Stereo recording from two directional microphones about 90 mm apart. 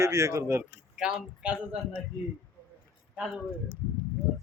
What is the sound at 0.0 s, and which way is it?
Speech, 35° right (ahead or behind).